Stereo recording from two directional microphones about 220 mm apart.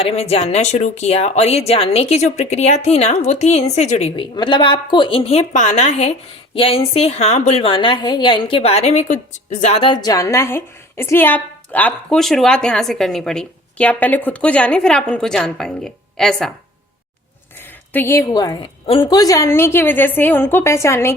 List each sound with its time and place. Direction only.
0.0 s speech: 30° left (ahead or behind); by 16.5 s centre (ahead or behind)
17.6 s a woman's voice: 10° left (ahead or behind)